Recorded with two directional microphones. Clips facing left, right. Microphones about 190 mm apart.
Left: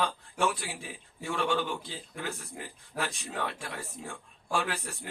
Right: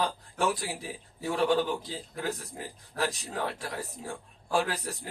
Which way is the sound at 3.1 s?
35° right (ahead or behind).